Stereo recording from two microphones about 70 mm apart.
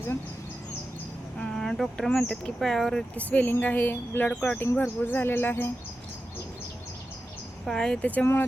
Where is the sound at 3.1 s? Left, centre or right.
Left.